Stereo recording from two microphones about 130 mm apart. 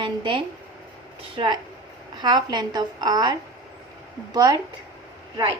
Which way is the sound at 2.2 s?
35° right (ahead or behind).